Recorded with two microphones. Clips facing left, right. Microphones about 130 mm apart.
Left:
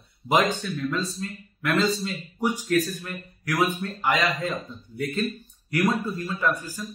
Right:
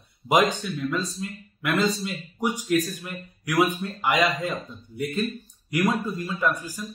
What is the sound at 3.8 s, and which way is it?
Speech, 15° right (ahead or behind).